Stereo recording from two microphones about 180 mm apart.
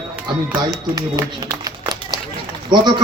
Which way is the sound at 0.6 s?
20° right (ahead or behind).